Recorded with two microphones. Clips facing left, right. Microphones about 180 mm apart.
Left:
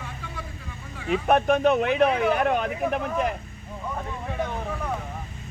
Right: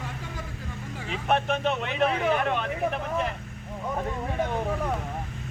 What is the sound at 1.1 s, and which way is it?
Speech, 45° left (ahead or behind).